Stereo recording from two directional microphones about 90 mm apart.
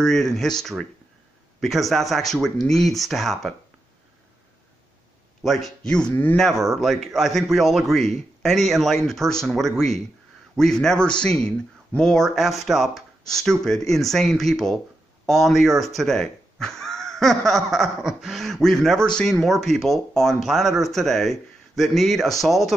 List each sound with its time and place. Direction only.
0.0 s speech: 5° left (ahead or behind)
5.4 s speech: centre (ahead or behind)